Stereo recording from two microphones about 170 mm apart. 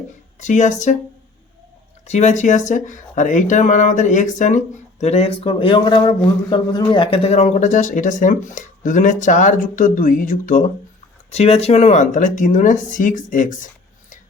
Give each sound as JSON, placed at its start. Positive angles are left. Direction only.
{"t": 0.3, "sound": "speech", "side_deg": 45}
{"t": 2.0, "sound": "speech", "side_deg": 40}
{"t": 11.3, "sound": "speech", "side_deg": 40}